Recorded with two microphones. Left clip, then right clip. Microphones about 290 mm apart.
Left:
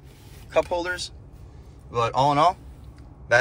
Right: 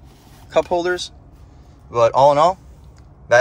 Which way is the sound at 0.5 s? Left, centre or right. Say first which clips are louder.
Right 6 dB; centre.